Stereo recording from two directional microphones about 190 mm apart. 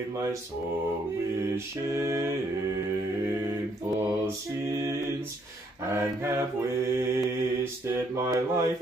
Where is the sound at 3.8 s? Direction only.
15° right (ahead or behind).